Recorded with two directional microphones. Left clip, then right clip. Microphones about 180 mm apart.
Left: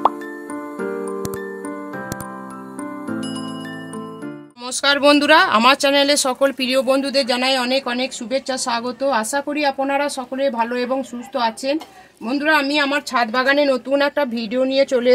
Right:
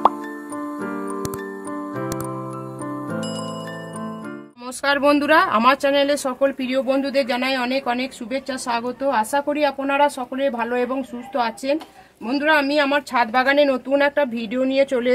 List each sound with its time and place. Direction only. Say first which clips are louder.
4.8 s speech: left 3 dB; 20° left (ahead or behind); by 15.0 s 40° left (ahead or behind)